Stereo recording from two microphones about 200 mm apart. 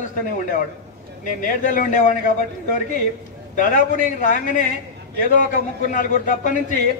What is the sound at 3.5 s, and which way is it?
A man's voice, 40° left (ahead or behind).